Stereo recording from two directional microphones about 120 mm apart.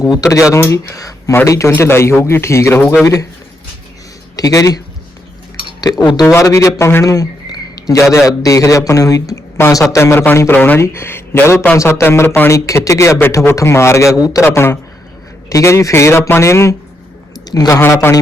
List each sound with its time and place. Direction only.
0.1 s speech: 25° left (ahead or behind)
2.8 s speech: centre (ahead or behind)
4.4 s speech: 30° left (ahead or behind)
5.8 s speech: 35° left (ahead or behind)
17.4 s a sound: 35° left (ahead or behind)
17.7 s speech: 20° left (ahead or behind)